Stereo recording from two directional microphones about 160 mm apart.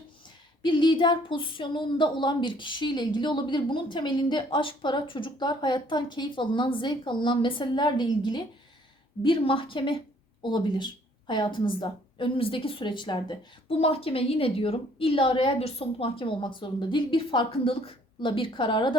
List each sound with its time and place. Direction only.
0.6 s a woman's voice: 30° left (ahead or behind)